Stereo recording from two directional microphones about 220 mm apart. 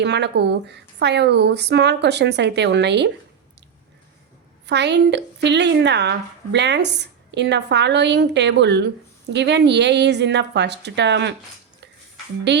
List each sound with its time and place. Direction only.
0.0 s a woman's voice: 50° right (ahead or behind)
4.6 s a woman's voice: 50° right (ahead or behind)
12.5 s a woman's voice: 50° right (ahead or behind)